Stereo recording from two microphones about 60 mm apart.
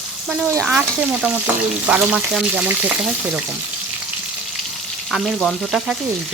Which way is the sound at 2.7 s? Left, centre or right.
Right.